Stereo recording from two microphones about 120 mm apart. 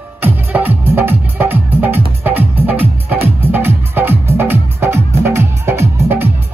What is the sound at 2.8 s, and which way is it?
Music, 55° right (ahead or behind).